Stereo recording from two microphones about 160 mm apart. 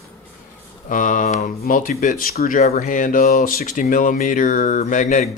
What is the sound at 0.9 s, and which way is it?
Speech, 55° left (ahead or behind).